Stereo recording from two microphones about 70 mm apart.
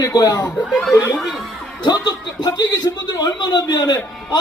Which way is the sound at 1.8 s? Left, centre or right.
Left.